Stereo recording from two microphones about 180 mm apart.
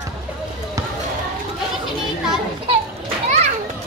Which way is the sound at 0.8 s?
20° right (ahead or behind).